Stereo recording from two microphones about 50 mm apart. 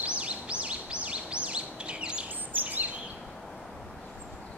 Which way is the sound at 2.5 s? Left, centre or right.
Right.